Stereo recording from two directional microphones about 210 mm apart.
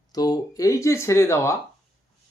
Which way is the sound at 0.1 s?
20° left (ahead or behind).